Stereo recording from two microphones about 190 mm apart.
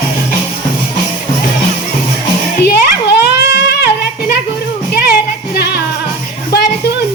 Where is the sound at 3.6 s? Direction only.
60° left (ahead or behind).